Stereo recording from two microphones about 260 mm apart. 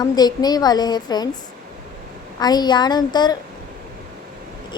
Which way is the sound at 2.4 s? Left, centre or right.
Centre.